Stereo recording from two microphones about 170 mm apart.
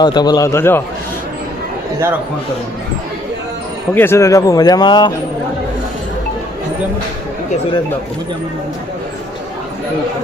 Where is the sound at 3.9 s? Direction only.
15° left (ahead or behind).